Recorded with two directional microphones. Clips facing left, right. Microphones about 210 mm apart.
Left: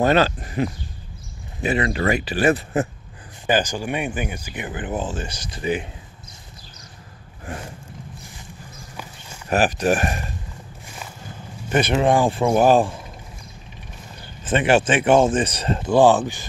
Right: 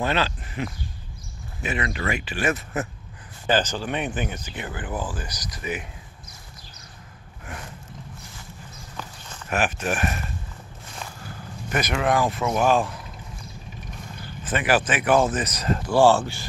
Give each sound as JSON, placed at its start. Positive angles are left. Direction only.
{"t": 0.0, "sound": "speech", "side_deg": 45}
{"t": 3.4, "sound": "speech", "side_deg": 15}
{"t": 9.5, "sound": "speech", "side_deg": 35}
{"t": 11.7, "sound": "speech", "side_deg": 30}
{"t": 14.4, "sound": "speech", "side_deg": 25}